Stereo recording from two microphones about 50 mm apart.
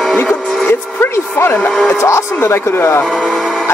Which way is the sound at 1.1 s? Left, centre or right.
Left.